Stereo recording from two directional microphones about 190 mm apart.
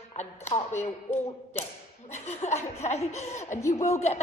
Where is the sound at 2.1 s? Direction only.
35° left (ahead or behind).